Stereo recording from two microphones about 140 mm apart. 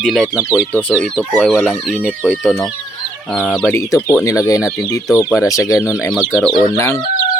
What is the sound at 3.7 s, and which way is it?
Speech, 20° left (ahead or behind).